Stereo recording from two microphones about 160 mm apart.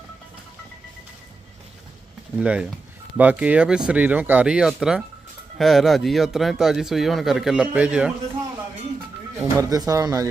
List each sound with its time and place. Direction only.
2.4 s speech: 5° right (ahead or behind)
9.4 s speech: 20° right (ahead or behind)